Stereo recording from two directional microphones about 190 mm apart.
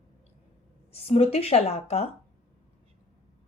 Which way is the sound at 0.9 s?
30° left (ahead or behind).